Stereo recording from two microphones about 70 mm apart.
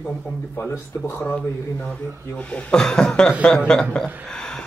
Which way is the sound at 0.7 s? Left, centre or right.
Left.